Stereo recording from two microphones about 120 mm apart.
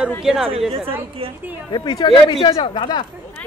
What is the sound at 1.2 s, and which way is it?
Speech, 50° right (ahead or behind).